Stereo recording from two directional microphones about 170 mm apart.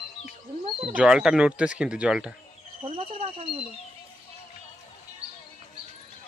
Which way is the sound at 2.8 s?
35° right (ahead or behind).